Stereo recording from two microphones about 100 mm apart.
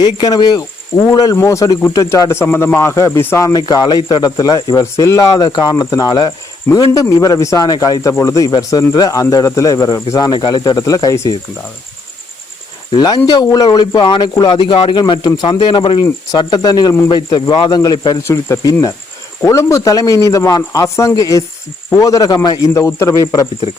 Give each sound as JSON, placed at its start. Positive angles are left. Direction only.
{"t": 0.0, "sound": "a man's voice", "side_deg": 45}
{"t": 3.5, "sound": "a man's voice", "side_deg": 45}
{"t": 5.5, "sound": "a man's voice", "side_deg": 45}
{"t": 8.4, "sound": "a man's voice", "side_deg": 45}
{"t": 13.0, "sound": "speech", "side_deg": 45}
{"t": 16.4, "sound": "speech", "side_deg": 40}
{"t": 18.2, "sound": "speech", "side_deg": 25}
{"t": 18.6, "sound": "a man's voice", "side_deg": 40}
{"t": 19.4, "sound": "a man's voice", "side_deg": 30}
{"t": 22.7, "sound": "a man's voice", "side_deg": 30}